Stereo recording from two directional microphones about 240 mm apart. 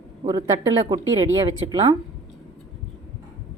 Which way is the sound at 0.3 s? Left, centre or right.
Centre.